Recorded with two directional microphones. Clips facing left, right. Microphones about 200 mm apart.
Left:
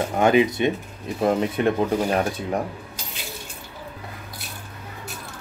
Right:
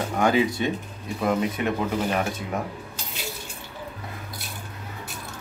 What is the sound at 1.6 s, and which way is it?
Speech, 35° left (ahead or behind).